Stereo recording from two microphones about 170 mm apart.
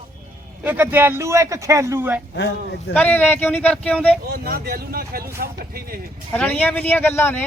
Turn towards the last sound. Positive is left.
turn(degrees=15)  # may be behind; listen again after turning